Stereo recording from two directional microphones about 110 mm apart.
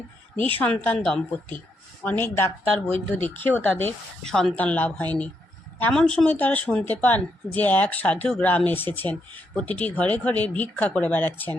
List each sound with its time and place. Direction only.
0.6 s speech: 15° left (ahead or behind)
4.3 s speech: 5° left (ahead or behind)